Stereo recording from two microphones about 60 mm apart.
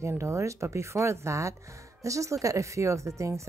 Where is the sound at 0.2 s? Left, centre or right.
Right.